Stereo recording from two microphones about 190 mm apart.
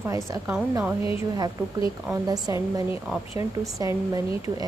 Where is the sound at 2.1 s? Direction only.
15° right (ahead or behind).